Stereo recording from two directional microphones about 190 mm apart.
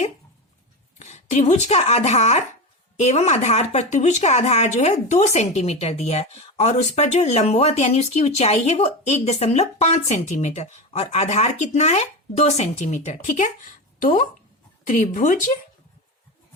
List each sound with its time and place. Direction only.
0.9 s speech: 35° left (ahead or behind)